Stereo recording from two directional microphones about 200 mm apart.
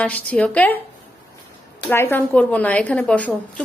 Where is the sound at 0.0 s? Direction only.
5° left (ahead or behind).